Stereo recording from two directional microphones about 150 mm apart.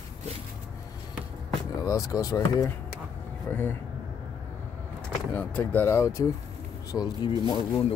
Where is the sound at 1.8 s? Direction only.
20° left (ahead or behind).